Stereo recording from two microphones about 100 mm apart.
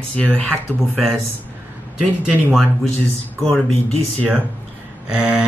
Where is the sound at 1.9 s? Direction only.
10° right (ahead or behind).